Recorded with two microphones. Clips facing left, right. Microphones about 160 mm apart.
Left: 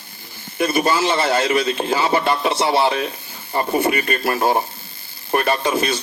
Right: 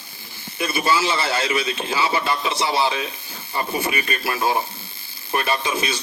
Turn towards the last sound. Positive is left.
turn(degrees=55)  # may be behind; listen again after turning